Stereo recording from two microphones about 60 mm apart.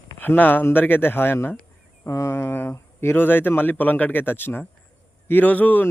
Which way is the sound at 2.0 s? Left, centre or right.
Left.